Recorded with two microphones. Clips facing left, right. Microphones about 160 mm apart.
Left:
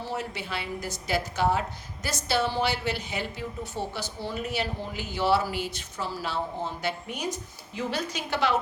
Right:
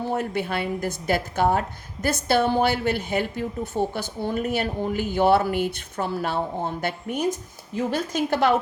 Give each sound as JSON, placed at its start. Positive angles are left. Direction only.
{"t": 0.0, "sound": "a woman's voice", "side_deg": -55}